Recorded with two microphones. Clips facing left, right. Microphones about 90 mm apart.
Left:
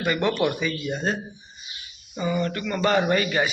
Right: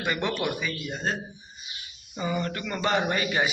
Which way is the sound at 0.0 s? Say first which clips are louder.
Left 5 dB; 15° right (ahead or behind).